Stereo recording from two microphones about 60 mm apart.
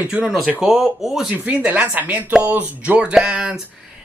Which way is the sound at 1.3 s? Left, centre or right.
Centre.